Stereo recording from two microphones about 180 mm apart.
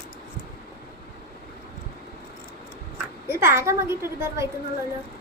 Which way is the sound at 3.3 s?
15° right (ahead or behind).